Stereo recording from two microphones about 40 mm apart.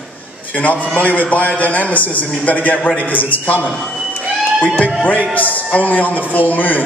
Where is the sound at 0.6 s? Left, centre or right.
Left.